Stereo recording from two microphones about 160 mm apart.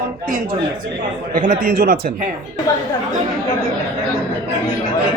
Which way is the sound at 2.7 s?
20° left (ahead or behind).